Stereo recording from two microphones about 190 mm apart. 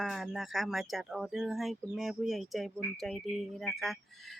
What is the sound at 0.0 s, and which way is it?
Speech, centre (ahead or behind).